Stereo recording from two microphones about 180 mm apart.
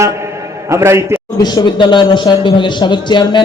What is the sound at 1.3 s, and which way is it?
A man's voice, 20° left (ahead or behind).